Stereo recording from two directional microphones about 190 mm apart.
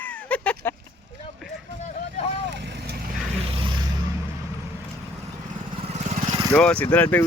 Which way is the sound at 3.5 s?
25° right (ahead or behind).